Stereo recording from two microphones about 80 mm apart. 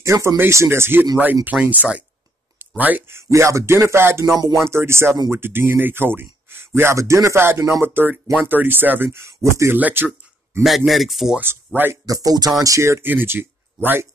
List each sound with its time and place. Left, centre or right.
0.0 s speech: right; by 2.0 s centre
2.6 s a sound: right
3.1 s speech: right
9.8 s speech: centre
10.5 s speech: right
10.9 s speech: centre
11.4 s speech: right
12.1 s speech: right
13.0 s speech: right